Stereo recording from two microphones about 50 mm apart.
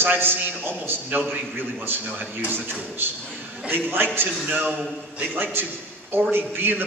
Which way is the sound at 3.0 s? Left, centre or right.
Right.